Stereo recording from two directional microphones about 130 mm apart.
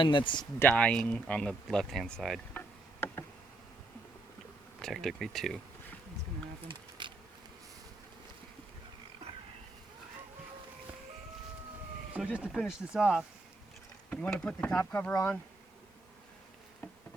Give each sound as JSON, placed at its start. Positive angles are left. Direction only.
{"t": 0.0, "sound": "speech", "side_deg": 40}
{"t": 0.6, "sound": "speech", "side_deg": 10}
{"t": 2.5, "sound": "tick-tock", "side_deg": 15}
{"t": 4.8, "sound": "speech", "side_deg": 0}
{"t": 7.0, "sound": "insect", "side_deg": -35}
{"t": 12.1, "sound": "speech", "side_deg": -10}
{"t": 14.1, "sound": "speech", "side_deg": 10}